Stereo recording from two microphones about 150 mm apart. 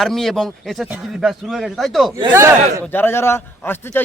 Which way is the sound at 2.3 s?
20° right (ahead or behind).